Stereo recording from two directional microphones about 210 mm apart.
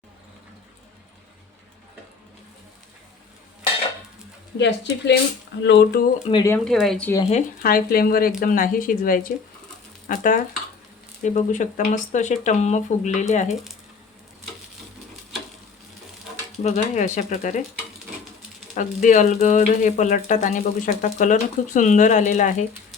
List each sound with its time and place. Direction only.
4.5 s speech: 55° left (ahead or behind)
6.2 s speech: 20° left (ahead or behind)
6.7 s speech: centre (ahead or behind)
7.3 s speech: 40° left (ahead or behind)
16.6 s speech: 35° left (ahead or behind)
18.7 s speech: 35° left (ahead or behind)